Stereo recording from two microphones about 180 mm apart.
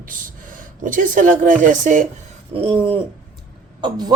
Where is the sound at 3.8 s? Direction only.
25° right (ahead or behind).